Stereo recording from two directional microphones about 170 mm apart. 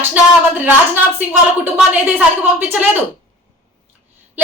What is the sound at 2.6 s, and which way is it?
Speech, 10° right (ahead or behind).